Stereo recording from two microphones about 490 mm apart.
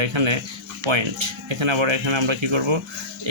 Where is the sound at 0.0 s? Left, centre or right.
Right.